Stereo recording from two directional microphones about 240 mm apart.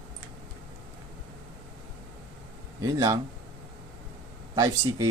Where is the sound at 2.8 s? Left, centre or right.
Centre.